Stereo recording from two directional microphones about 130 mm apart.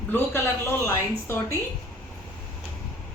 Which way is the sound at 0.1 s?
15° left (ahead or behind).